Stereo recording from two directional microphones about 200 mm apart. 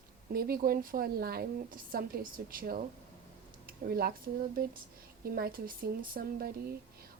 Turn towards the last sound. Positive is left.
turn(degrees=-50)  # may be behind; listen again after turning